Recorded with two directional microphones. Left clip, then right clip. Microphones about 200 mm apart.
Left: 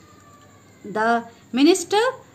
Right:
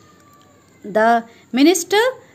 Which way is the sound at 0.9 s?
35° right (ahead or behind).